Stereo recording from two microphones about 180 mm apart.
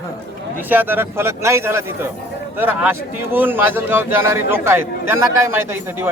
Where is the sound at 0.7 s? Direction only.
10° right (ahead or behind).